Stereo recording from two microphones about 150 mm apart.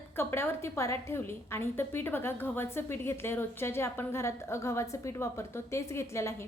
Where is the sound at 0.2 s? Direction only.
15° left (ahead or behind).